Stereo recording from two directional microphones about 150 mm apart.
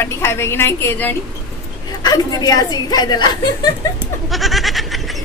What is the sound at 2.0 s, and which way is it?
A woman's voice, 25° left (ahead or behind).